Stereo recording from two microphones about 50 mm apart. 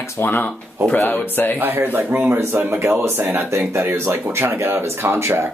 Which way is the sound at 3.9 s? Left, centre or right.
Right.